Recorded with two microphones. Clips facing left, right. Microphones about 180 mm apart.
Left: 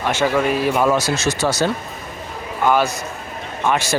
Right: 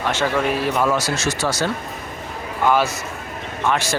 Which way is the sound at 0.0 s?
10° left (ahead or behind).